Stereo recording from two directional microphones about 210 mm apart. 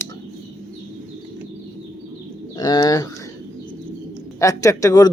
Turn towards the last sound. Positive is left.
turn(degrees=15)  # may be behind; listen again after turning